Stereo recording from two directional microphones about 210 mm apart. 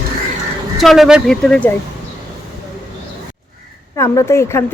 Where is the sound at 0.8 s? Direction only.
Centre (ahead or behind).